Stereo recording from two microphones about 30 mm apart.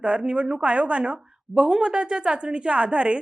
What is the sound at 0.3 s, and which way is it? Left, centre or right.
Speech, right.